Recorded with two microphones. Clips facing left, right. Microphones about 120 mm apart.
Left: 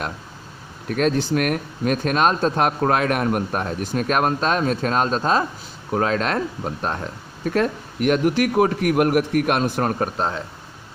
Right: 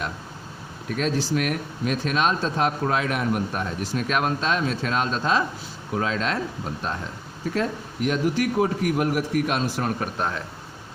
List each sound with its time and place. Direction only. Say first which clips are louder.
0.9 s speech: left 5 dB; 55° left (ahead or behind)
5.9 s speech: left 4 dB; 55° left (ahead or behind)
10.0 s speech: left 4 dB; 30° left (ahead or behind)